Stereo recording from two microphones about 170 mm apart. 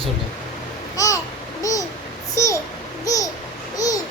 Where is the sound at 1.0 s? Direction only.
20° left (ahead or behind).